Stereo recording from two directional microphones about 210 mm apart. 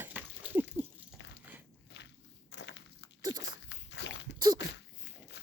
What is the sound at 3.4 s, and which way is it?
Walk, 55° left (ahead or behind).